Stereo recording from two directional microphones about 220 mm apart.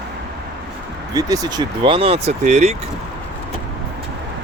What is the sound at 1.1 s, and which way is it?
Speech, 15° right (ahead or behind).